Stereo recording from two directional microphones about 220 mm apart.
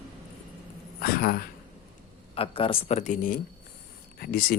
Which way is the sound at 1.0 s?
45° left (ahead or behind).